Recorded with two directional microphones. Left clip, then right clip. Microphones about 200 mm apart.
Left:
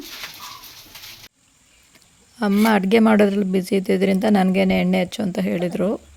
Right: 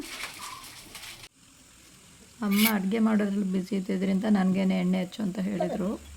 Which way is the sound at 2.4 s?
45° left (ahead or behind).